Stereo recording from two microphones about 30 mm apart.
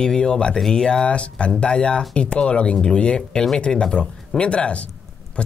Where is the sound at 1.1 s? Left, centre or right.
Left.